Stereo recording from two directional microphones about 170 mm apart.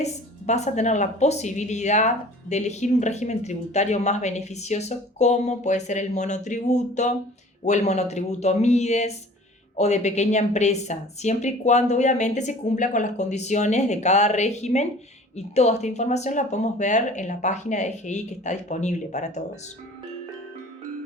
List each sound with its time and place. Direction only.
0.0 s a woman's voice: 40° left (ahead or behind)